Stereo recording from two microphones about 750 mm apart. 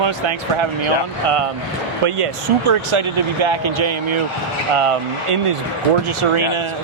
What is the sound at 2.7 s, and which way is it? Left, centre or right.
Speech, right.